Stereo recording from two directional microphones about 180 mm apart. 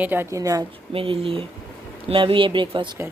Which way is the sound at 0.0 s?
10° right (ahead or behind).